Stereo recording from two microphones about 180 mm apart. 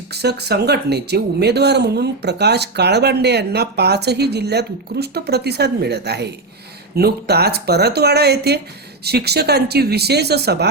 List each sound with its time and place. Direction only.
0.1 s speech: 65° right (ahead or behind)